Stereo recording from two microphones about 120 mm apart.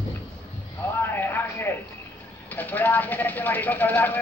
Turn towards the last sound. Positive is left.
turn(degrees=15)  # may be behind; listen again after turning